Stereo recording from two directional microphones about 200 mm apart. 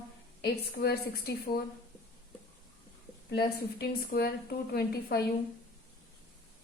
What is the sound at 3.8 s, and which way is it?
A woman's voice, 50° left (ahead or behind).